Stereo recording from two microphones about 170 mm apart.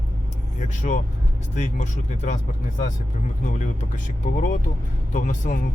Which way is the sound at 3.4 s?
45° left (ahead or behind).